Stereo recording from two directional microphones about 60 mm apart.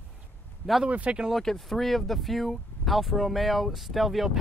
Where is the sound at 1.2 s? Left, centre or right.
Centre.